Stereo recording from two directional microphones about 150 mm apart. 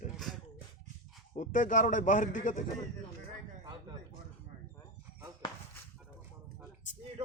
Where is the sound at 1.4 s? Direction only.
60° left (ahead or behind).